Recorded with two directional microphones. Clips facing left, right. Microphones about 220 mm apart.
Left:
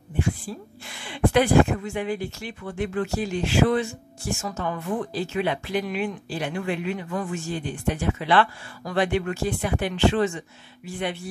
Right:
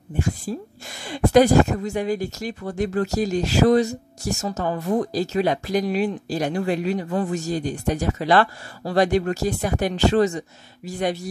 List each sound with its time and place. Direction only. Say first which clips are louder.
0.2 s a woman's voice: right 2 dB; 40° right (ahead or behind)